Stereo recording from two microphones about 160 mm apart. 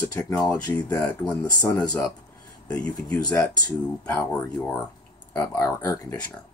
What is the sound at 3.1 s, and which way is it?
Speech, 25° left (ahead or behind).